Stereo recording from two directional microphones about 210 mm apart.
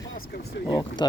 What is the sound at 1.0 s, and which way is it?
Speech, 20° left (ahead or behind).